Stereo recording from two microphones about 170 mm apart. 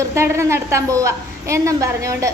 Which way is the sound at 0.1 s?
15° right (ahead or behind).